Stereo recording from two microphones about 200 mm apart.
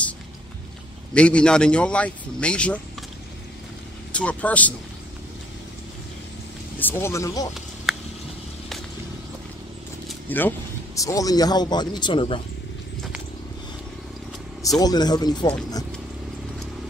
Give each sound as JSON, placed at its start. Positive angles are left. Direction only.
{"t": 1.1, "sound": "a man's voice", "side_deg": 5}
{"t": 4.1, "sound": "speech", "side_deg": 5}
{"t": 6.8, "sound": "speech", "side_deg": 10}
{"t": 7.9, "sound": "a sound", "side_deg": 0}
{"t": 10.0, "sound": "vehicle", "side_deg": 10}
{"t": 11.0, "sound": "speech", "side_deg": 15}
{"t": 14.8, "sound": "speech", "side_deg": 20}